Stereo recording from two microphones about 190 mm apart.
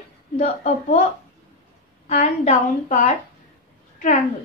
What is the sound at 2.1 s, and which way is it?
A woman's voice, 35° left (ahead or behind).